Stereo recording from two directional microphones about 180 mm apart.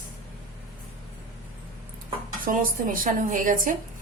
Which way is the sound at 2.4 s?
50° right (ahead or behind).